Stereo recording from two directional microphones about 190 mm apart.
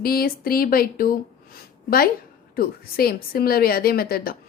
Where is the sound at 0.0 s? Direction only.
50° left (ahead or behind).